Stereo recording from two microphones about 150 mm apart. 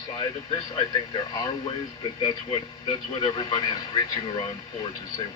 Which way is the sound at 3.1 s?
30° left (ahead or behind).